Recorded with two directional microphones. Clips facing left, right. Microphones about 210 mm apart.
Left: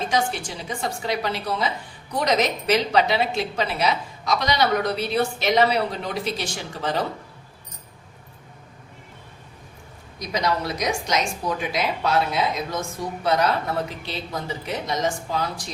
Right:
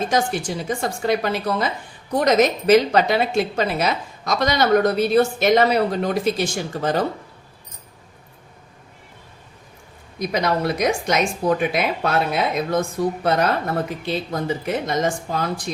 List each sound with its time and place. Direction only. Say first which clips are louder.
0.1 s speech: right 3 dB; 45° right (ahead or behind)
10.2 s speech: right 4 dB; 55° right (ahead or behind)